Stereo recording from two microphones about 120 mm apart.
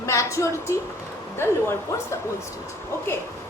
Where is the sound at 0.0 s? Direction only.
25° left (ahead or behind).